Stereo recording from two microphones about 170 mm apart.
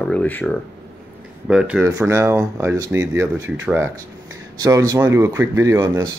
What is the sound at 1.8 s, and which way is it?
Speech, 20° right (ahead or behind).